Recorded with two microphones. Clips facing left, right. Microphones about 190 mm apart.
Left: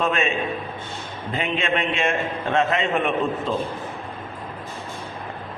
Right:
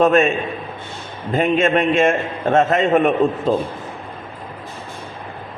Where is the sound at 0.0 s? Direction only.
45° right (ahead or behind).